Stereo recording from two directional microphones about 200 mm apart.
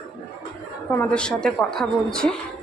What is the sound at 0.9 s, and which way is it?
A woman's voice, 5° left (ahead or behind).